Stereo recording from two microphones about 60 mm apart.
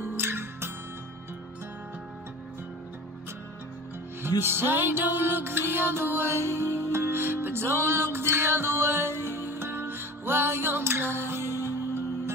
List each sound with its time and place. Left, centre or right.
0.1 s music: right
4.4 s music: right